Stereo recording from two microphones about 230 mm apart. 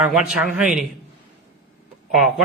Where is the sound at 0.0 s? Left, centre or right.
Centre.